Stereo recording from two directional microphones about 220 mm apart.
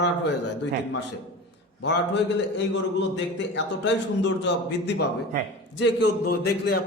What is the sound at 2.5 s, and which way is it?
A man's voice, 55° left (ahead or behind).